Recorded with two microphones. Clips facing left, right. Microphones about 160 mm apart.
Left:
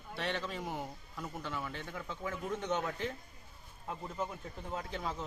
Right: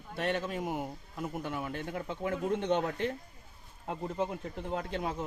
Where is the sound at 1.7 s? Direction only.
50° right (ahead or behind); by 4.3 s 70° right (ahead or behind).